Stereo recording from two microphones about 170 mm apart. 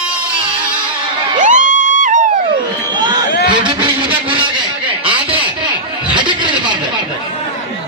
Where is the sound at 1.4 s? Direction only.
50° right (ahead or behind).